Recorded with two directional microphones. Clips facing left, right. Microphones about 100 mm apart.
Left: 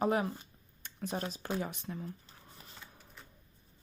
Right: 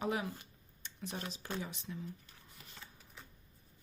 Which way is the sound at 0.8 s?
45° left (ahead or behind).